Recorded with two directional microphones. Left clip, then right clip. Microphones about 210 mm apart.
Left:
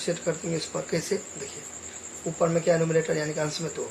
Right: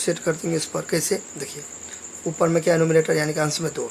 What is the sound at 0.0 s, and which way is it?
Speech, 40° right (ahead or behind).